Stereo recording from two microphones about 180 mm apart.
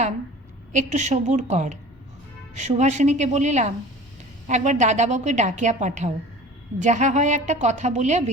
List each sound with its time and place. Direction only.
0.7 s a woman's voice: 40° right (ahead or behind)